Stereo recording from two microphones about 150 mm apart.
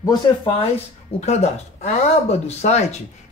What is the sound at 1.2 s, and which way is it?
Speech, 50° left (ahead or behind).